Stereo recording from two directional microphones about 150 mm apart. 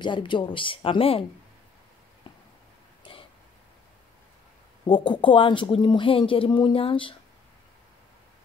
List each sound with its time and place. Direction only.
0.0 s speech: 30° left (ahead or behind)
2.3 s a sound: 35° left (ahead or behind)
4.8 s speech: 35° left (ahead or behind)